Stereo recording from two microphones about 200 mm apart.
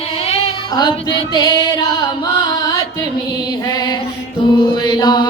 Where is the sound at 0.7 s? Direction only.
20° left (ahead or behind).